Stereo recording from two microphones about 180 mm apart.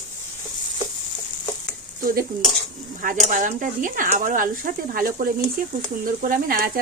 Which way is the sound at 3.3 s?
45° right (ahead or behind).